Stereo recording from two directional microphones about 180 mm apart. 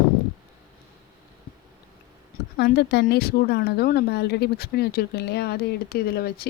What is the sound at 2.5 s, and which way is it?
A woman's voice, 70° left (ahead or behind).